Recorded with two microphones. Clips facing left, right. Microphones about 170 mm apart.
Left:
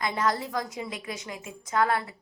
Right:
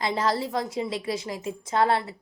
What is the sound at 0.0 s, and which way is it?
A woman's voice, 30° right (ahead or behind).